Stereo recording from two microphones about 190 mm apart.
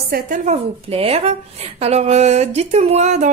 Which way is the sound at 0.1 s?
40° right (ahead or behind).